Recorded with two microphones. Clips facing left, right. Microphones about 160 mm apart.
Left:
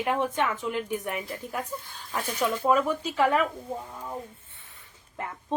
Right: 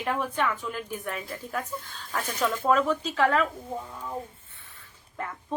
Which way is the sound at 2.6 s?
10° left (ahead or behind).